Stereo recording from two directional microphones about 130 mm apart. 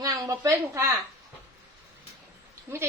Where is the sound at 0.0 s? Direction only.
25° right (ahead or behind).